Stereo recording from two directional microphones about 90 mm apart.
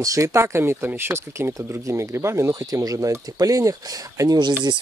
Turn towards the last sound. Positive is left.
turn(degrees=-50)  # may be behind; listen again after turning